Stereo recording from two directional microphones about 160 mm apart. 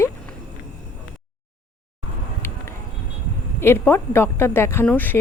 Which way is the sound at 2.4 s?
15° left (ahead or behind).